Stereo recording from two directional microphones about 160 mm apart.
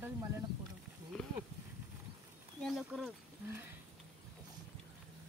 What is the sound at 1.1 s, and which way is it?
Speech, 5° left (ahead or behind).